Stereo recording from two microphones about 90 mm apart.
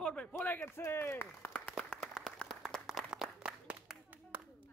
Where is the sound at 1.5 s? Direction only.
10° left (ahead or behind); by 4.4 s 15° right (ahead or behind).